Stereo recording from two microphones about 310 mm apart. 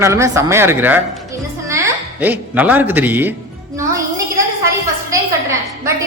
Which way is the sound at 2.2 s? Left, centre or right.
Centre.